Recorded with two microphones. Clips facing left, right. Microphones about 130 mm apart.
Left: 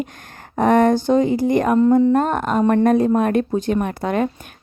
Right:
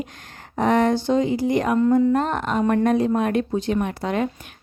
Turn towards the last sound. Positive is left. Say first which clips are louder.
# left 3 dB
turn(degrees=50)  # may be behind; listen again after turning